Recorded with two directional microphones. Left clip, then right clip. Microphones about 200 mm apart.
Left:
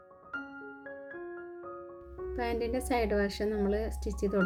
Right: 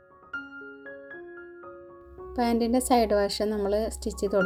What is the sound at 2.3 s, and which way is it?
Speech, 30° right (ahead or behind).